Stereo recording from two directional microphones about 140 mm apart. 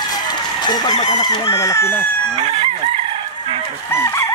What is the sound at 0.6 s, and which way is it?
Chicken, 30° left (ahead or behind).